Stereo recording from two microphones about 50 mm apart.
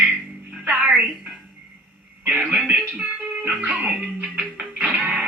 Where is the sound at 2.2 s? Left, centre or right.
Right.